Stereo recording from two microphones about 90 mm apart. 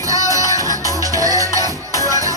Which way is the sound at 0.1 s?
40° right (ahead or behind).